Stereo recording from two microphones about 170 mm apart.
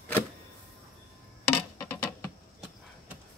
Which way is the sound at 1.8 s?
15° left (ahead or behind).